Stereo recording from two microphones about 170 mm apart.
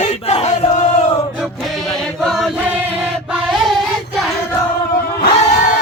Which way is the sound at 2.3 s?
Centre (ahead or behind).